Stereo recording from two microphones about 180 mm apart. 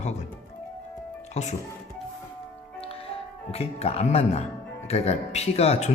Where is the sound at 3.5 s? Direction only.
35° left (ahead or behind).